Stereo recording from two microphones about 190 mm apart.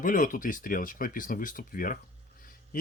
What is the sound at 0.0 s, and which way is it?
Speech, 45° left (ahead or behind).